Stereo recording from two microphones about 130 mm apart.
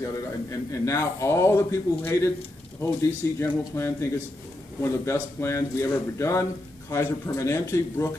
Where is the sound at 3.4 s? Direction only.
20° left (ahead or behind).